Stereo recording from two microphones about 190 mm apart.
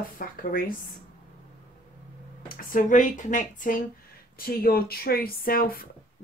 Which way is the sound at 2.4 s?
45° left (ahead or behind).